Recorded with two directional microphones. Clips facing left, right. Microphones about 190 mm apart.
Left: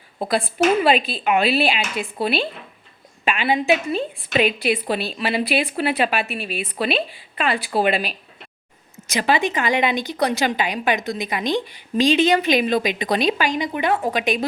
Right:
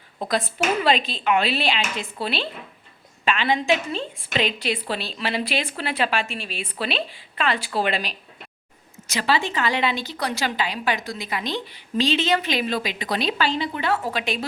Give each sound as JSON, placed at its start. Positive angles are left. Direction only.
{"t": 0.3, "sound": "speech", "side_deg": 10}